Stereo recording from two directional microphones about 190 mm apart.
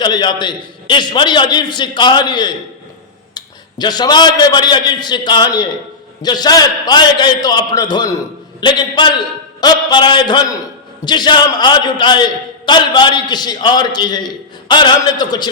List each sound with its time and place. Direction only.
0.0 s a man's voice: 20° left (ahead or behind)